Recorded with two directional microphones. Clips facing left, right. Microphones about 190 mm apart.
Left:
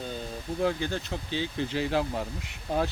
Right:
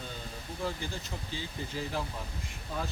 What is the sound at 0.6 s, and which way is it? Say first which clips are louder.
Speech: left 8 dB; 70° left (ahead or behind).